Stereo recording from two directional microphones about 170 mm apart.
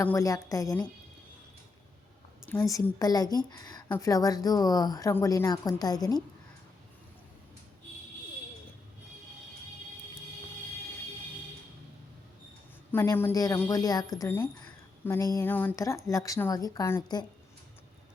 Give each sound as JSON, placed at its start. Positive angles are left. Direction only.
{"t": 0.0, "sound": "speech", "side_deg": 15}
{"t": 2.7, "sound": "speech", "side_deg": 20}
{"t": 12.9, "sound": "speech", "side_deg": 15}